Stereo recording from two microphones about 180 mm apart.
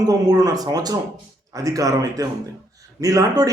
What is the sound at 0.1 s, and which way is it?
Speech, 20° right (ahead or behind).